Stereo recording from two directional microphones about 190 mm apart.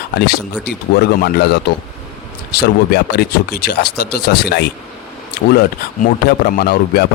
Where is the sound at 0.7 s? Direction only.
55° left (ahead or behind).